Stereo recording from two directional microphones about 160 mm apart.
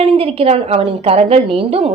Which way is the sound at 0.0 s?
40° right (ahead or behind).